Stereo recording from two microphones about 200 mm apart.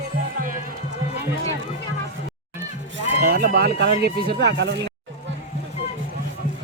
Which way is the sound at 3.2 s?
45° right (ahead or behind).